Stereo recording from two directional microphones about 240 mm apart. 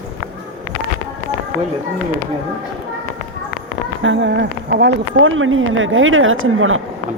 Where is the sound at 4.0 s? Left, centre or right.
Right.